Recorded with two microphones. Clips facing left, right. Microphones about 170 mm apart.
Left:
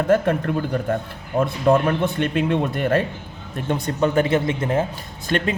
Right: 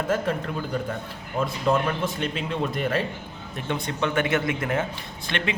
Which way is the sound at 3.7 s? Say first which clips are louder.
Left 6 dB; 40° left (ahead or behind).